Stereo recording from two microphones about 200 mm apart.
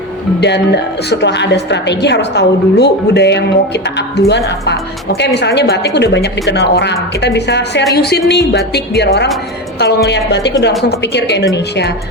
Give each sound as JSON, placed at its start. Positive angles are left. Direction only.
{"t": 0.3, "sound": "a woman's voice", "side_deg": 60}